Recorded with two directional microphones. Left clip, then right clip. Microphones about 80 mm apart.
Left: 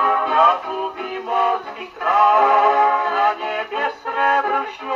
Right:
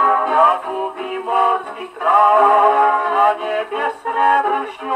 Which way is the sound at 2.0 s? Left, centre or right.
Right.